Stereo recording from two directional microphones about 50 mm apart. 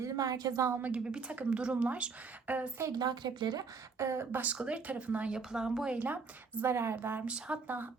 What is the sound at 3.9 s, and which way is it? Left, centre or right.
Speech, right.